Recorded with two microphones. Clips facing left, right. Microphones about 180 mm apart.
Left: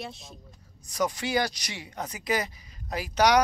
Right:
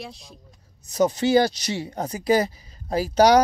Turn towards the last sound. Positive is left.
turn(degrees=-30)  # may be behind; listen again after turning